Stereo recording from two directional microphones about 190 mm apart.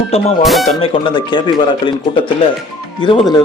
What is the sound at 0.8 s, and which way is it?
Speech, 30° left (ahead or behind).